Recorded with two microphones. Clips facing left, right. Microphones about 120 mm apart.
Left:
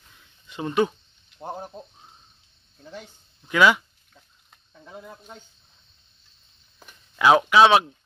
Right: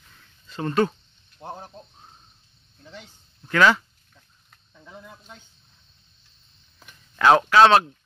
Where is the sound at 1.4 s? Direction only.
5° left (ahead or behind).